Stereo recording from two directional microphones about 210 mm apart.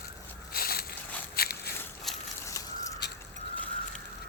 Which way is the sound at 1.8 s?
10° left (ahead or behind).